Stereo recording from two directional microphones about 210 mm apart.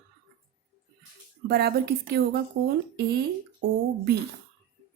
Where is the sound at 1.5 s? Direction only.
50° right (ahead or behind).